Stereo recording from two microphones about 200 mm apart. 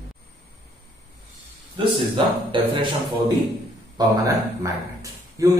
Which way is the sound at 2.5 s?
25° right (ahead or behind).